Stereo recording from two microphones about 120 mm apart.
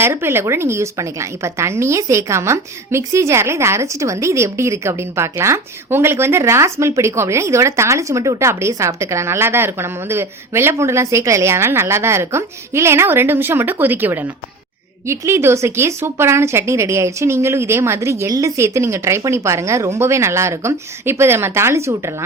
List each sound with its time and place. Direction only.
0.0 s a woman's voice: 20° right (ahead or behind)